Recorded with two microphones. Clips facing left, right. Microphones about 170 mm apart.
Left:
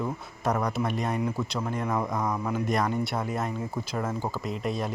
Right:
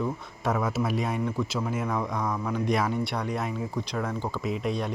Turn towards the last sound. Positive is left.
turn(degrees=0)  # may be behind; listen again after turning